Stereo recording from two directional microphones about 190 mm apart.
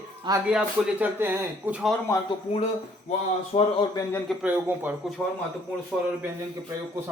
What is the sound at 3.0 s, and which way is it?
Speech, 35° left (ahead or behind).